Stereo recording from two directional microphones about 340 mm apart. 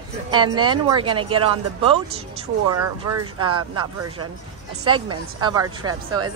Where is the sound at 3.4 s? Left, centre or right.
Centre.